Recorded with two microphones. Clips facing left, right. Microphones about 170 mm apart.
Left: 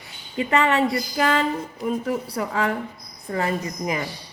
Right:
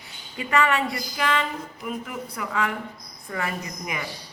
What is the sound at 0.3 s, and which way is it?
Speech, 30° left (ahead or behind).